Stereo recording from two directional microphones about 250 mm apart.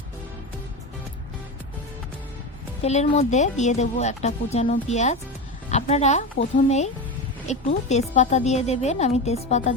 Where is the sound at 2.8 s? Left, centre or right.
Left.